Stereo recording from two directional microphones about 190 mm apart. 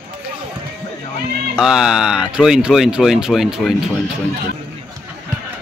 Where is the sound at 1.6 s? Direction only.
5° right (ahead or behind).